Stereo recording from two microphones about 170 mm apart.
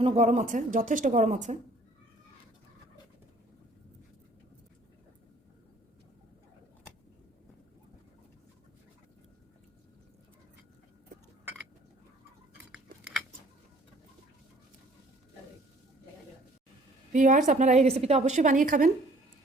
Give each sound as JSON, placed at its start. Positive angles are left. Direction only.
{"t": 0.0, "sound": "a woman's voice", "side_deg": -40}
{"t": 12.7, "sound": "keys jangling", "side_deg": -5}
{"t": 17.1, "sound": "a woman's voice", "side_deg": -50}